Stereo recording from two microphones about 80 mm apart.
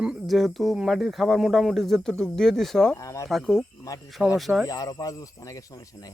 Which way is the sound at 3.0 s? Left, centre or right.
Left.